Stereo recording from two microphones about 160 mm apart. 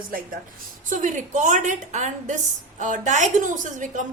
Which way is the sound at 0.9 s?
55° right (ahead or behind).